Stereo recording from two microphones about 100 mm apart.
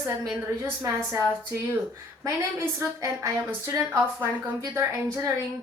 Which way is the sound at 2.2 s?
30° right (ahead or behind).